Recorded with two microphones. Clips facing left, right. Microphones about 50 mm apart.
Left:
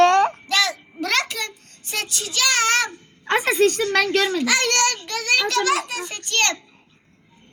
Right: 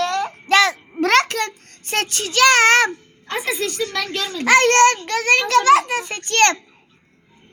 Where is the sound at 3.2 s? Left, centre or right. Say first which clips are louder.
Left 6 dB; left.